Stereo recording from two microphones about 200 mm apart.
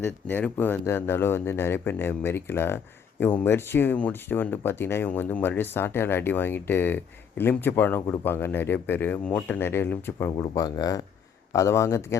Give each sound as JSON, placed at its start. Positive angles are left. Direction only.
{"t": 0.0, "sound": "speech", "side_deg": 10}